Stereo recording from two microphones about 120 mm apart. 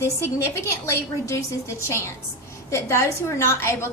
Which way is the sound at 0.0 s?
20° left (ahead or behind).